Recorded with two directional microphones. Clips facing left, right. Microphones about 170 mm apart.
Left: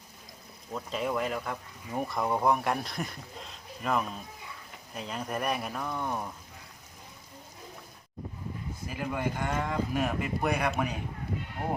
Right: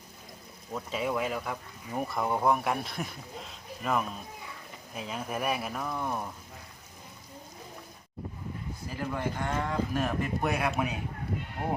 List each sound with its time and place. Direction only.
0.7 s speech: 5° right (ahead or behind)
8.9 s speech: 10° left (ahead or behind)